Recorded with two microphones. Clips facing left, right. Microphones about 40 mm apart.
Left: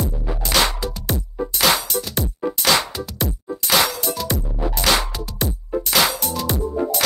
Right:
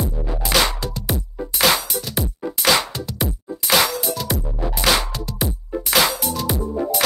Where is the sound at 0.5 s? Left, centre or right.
Centre.